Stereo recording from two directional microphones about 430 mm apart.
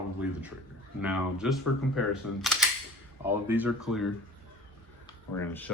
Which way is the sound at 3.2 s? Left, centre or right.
Centre.